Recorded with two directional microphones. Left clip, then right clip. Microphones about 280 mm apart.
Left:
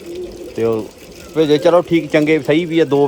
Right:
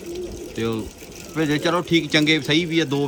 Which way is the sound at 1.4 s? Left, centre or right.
Centre.